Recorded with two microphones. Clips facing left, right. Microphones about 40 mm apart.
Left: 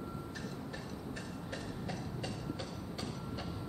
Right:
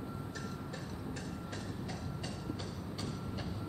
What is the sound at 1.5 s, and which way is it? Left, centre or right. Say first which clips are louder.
Train: left 1 dB; centre.